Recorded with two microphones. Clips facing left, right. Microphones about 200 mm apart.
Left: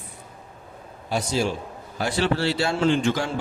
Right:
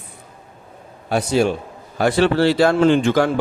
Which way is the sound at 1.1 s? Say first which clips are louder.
Right 7 dB; 60° right (ahead or behind).